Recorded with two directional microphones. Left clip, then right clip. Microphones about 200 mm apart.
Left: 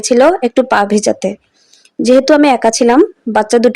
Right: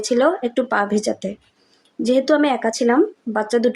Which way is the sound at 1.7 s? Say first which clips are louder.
Left 15 dB; 45° left (ahead or behind).